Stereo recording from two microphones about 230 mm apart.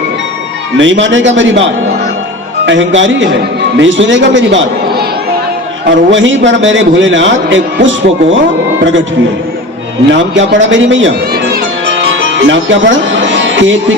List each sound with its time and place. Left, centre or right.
0.8 s a man's voice: right
2.6 s a man's voice: right
6.1 s a man's voice: right
10.1 s a man's voice: right
11.5 s music: right